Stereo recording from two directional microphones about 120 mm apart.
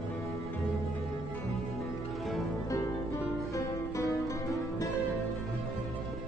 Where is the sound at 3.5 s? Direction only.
25° left (ahead or behind).